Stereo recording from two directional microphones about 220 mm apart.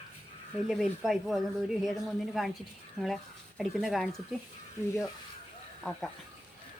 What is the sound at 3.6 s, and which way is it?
Speech, centre (ahead or behind).